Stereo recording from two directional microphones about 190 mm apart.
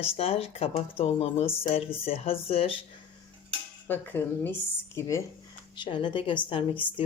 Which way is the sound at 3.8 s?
10° left (ahead or behind).